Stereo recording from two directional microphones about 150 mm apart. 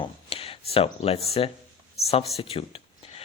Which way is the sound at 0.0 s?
40° left (ahead or behind).